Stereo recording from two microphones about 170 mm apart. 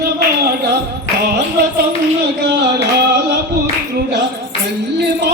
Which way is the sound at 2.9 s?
70° right (ahead or behind).